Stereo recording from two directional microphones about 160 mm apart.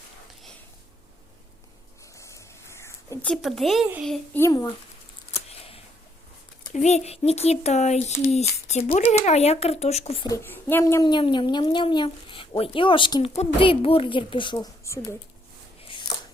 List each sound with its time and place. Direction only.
2.1 s a sound: 20° left (ahead or behind); by 3.8 s centre (ahead or behind)
4.4 s speech: 20° left (ahead or behind)
5.5 s camera: 40° left (ahead or behind)
6.7 s speech: 45° left (ahead or behind)
10.2 s speech: 15° left (ahead or behind)
11.0 s speech: 30° left (ahead or behind)
15.8 s a sound: 30° left (ahead or behind)